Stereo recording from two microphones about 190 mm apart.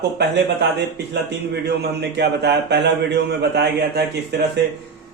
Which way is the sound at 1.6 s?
60° right (ahead or behind).